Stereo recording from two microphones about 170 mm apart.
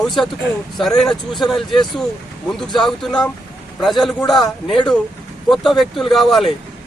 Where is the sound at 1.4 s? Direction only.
25° left (ahead or behind).